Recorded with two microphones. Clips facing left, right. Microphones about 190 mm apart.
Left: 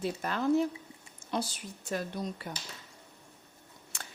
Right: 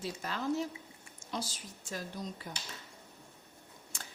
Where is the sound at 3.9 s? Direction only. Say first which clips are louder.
Left 2 dB; 65° left (ahead or behind).